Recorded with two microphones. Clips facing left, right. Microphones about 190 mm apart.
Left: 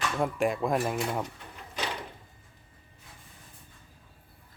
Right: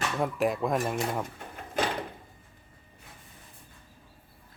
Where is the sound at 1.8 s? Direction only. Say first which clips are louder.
Right 6 dB; 50° right (ahead or behind).